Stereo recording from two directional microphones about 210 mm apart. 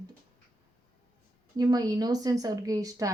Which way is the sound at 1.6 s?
20° right (ahead or behind).